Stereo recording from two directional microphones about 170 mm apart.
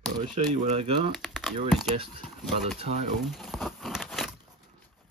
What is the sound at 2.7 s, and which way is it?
Speech, 40° right (ahead or behind).